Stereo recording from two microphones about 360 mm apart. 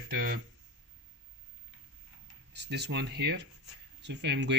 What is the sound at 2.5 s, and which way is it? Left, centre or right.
Speech, right.